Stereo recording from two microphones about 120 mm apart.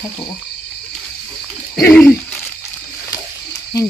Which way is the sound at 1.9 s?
10° left (ahead or behind).